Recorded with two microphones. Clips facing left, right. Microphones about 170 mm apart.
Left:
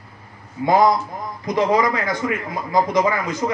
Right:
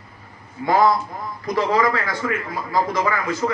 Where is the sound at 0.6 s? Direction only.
15° left (ahead or behind).